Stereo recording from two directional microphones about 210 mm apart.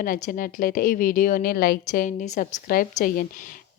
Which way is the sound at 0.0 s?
40° left (ahead or behind).